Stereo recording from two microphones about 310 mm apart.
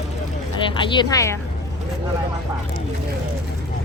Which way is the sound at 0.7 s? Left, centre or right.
Centre.